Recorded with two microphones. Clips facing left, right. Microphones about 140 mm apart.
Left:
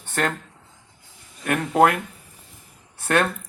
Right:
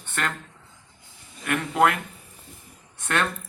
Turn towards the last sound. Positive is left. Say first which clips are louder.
# left 5 dB
turn(degrees=35)  # may be behind; listen again after turning